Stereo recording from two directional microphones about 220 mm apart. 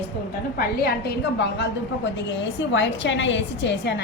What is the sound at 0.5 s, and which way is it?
A woman's voice, 45° left (ahead or behind).